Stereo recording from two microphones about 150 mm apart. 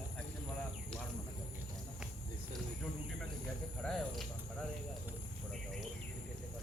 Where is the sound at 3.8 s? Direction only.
Centre (ahead or behind).